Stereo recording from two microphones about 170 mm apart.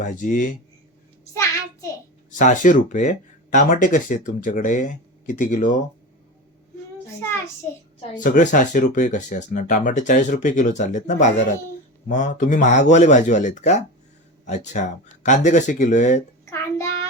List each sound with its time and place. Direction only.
0.0 s speech: 50° left (ahead or behind)
1.2 s child singing: 20° left (ahead or behind)
2.4 s speech: 50° left (ahead or behind)
8.1 s speech: 50° left (ahead or behind)
16.5 s child singing: 15° left (ahead or behind)